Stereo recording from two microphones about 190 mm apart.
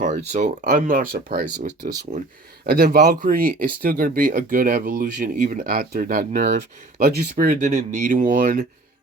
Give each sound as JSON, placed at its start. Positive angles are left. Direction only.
{"t": 0.0, "sound": "speech", "side_deg": -40}
{"t": 2.6, "sound": "speech", "side_deg": -50}
{"t": 7.7, "sound": "speech", "side_deg": -35}